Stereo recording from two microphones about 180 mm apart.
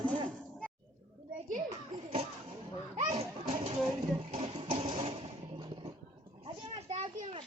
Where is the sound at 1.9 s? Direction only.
35° right (ahead or behind).